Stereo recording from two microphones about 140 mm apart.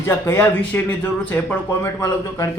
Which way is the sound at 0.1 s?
15° left (ahead or behind).